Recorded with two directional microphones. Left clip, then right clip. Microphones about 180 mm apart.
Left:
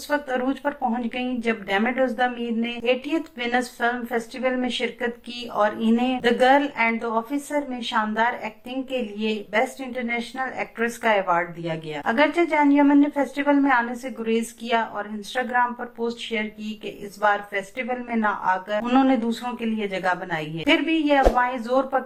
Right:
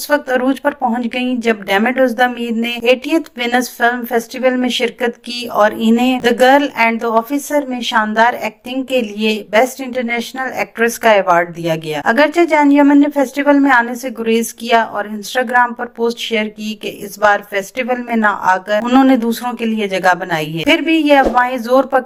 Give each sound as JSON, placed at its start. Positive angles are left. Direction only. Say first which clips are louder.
{"t": 0.1, "sound": "speech", "louder": "right 10 dB", "side_deg": -35}